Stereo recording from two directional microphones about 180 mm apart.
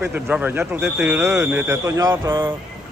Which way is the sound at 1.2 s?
15° right (ahead or behind).